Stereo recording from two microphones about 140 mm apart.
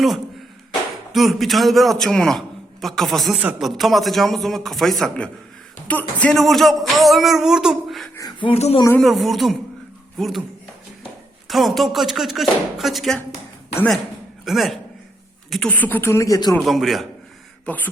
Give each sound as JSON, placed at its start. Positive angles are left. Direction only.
{"t": 1.1, "sound": "music", "side_deg": 0}
{"t": 8.4, "sound": "speech", "side_deg": 45}
{"t": 9.0, "sound": "music", "side_deg": 0}
{"t": 11.4, "sound": "music", "side_deg": 0}
{"t": 14.4, "sound": "music", "side_deg": 0}
{"t": 15.4, "sound": "speech", "side_deg": 0}
{"t": 15.7, "sound": "speech", "side_deg": 10}
{"t": 16.6, "sound": "music", "side_deg": 0}